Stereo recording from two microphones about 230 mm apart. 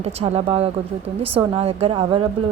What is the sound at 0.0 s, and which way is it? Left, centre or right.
A woman's voice, right.